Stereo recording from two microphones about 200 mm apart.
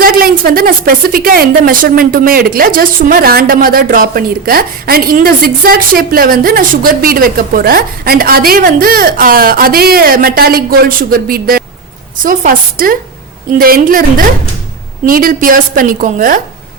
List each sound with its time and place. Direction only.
0.0 s a woman's voice: 45° right (ahead or behind)